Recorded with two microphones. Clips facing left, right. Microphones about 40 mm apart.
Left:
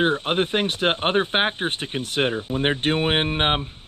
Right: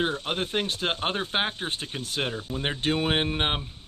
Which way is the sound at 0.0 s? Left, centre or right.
Left.